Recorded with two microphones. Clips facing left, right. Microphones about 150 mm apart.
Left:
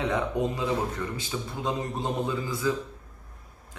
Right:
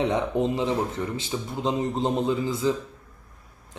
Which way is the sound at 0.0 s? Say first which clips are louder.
Right 3 dB; 25° right (ahead or behind).